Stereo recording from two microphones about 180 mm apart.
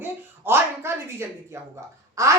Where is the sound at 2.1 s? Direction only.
15° right (ahead or behind).